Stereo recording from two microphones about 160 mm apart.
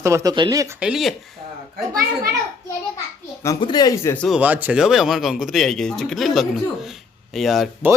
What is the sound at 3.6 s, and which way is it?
Speech, 25° left (ahead or behind).